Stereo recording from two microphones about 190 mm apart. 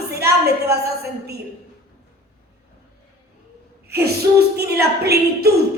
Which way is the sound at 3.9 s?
55° right (ahead or behind).